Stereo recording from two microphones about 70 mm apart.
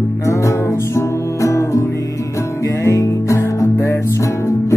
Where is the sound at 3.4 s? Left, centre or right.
Left.